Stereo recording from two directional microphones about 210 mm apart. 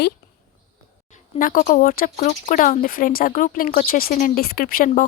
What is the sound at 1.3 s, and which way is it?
Speech, 40° left (ahead or behind).